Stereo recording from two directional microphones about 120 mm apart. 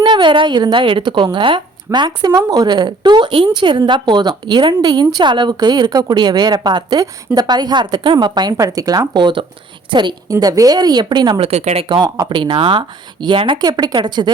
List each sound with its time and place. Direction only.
0.0 s speech: 40° right (ahead or behind)
10.2 s speech: 30° right (ahead or behind)
11.4 s speech: 60° right (ahead or behind)
11.9 s speech: 35° right (ahead or behind)
12.3 s speech: 45° right (ahead or behind)